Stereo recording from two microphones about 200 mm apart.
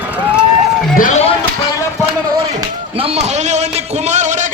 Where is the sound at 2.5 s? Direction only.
30° right (ahead or behind).